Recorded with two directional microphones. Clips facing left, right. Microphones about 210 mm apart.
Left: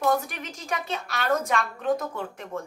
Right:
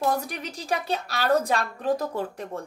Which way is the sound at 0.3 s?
35° right (ahead or behind).